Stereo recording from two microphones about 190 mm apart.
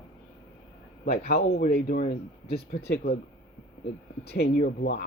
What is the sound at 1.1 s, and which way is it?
Speech, 55° left (ahead or behind).